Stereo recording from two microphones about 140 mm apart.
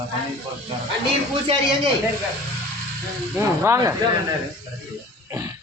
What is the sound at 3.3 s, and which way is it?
Speech, 20° right (ahead or behind).